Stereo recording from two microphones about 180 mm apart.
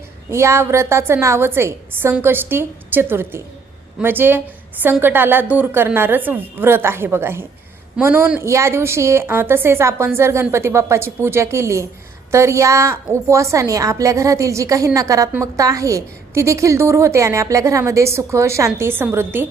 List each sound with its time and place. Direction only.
0.3 s a woman's voice: 15° right (ahead or behind)